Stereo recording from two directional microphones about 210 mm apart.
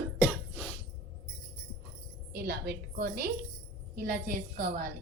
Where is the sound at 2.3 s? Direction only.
50° right (ahead or behind).